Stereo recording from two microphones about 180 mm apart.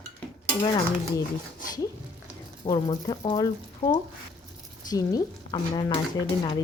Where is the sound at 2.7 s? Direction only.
25° left (ahead or behind).